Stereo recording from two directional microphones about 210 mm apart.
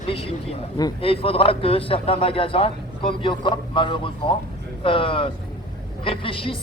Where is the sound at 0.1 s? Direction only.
25° left (ahead or behind).